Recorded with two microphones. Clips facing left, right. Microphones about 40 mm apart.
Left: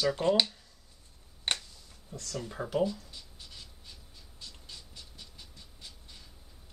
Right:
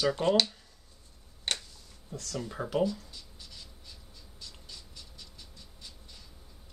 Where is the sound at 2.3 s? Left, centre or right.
Centre.